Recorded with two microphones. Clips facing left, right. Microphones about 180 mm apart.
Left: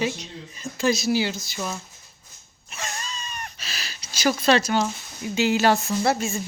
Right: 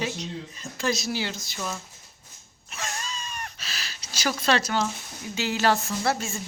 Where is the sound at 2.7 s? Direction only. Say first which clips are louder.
Left 1 dB; centre (ahead or behind).